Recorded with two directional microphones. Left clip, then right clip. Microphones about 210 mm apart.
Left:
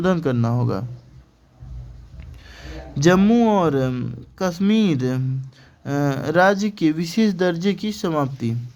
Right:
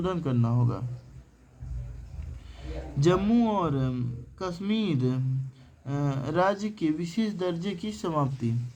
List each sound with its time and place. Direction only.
0.0 s speech: 50° left (ahead or behind)
2.5 s speech: 55° left (ahead or behind)